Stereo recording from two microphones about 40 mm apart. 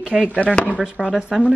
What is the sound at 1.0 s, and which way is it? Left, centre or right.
Speech, right.